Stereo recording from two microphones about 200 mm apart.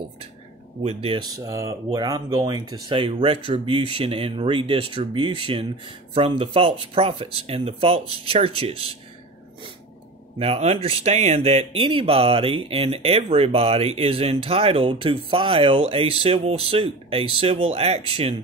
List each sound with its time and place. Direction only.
0.8 s speech: 25° right (ahead or behind)
10.4 s speech: 30° right (ahead or behind)